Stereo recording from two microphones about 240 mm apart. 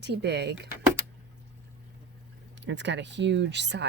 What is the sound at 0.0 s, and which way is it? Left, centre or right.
Speech, right.